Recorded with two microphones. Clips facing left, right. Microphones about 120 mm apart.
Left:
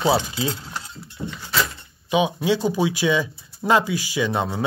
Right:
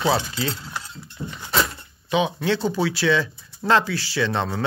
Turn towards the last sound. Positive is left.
turn(degrees=15)  # may be behind; listen again after turning